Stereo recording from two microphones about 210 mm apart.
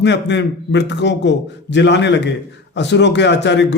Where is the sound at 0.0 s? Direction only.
55° left (ahead or behind).